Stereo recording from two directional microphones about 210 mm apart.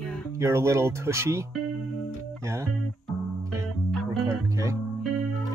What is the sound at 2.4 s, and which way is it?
Music, 15° right (ahead or behind).